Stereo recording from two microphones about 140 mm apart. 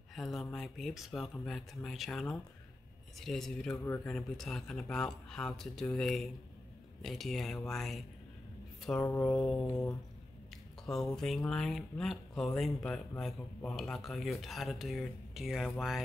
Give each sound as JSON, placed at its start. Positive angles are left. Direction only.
{"t": 0.1, "sound": "speech", "side_deg": 0}
{"t": 3.7, "sound": "speech", "side_deg": 15}
{"t": 4.1, "sound": "speech", "side_deg": 5}
{"t": 8.9, "sound": "speech", "side_deg": 15}
{"t": 10.5, "sound": "a sound", "side_deg": 0}
{"t": 11.1, "sound": "speech", "side_deg": 5}